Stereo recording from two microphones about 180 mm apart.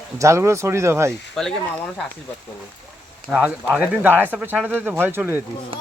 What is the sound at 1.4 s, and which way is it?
Speech, centre (ahead or behind).